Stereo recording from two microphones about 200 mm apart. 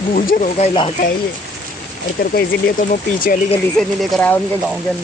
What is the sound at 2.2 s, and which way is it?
Speech, 45° left (ahead or behind).